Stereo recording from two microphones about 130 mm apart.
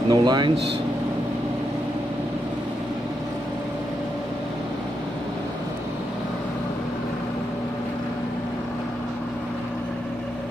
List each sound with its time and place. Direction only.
0.1 s speech: 35° right (ahead or behind)